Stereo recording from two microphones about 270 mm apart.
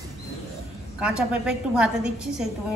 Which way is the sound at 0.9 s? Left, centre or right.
Centre.